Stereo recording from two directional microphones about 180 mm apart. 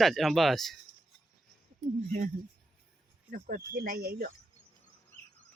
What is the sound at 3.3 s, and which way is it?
Speech, 50° right (ahead or behind).